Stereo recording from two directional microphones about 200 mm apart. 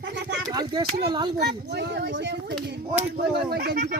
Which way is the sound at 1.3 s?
55° right (ahead or behind).